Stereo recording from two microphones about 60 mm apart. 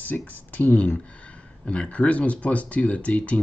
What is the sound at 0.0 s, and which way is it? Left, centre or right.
Speech, left.